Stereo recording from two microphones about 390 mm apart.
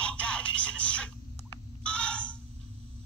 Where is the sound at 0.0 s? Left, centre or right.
Centre.